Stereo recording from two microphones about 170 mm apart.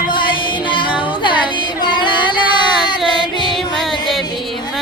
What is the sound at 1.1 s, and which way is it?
Carnatic music, 30° left (ahead or behind).